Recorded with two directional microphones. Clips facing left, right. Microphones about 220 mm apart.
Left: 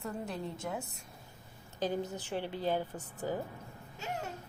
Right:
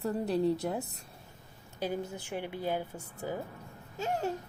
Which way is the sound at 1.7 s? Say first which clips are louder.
Even; 10° right (ahead or behind).